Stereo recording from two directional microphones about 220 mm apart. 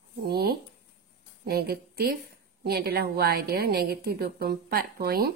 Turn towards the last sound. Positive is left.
turn(degrees=-45)  # may be behind; listen again after turning